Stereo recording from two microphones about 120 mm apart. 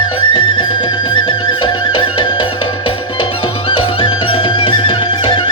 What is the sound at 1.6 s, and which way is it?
Music, 40° left (ahead or behind).